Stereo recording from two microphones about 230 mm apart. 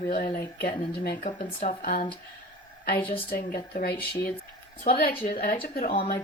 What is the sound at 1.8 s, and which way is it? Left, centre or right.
Speech, left.